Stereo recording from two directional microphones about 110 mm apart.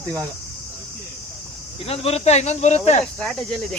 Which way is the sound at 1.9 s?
70° left (ahead or behind).